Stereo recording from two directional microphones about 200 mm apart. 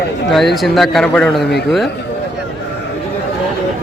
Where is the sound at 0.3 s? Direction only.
Centre (ahead or behind).